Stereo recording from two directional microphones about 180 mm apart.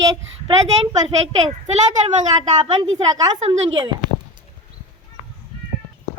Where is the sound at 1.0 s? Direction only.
35° right (ahead or behind).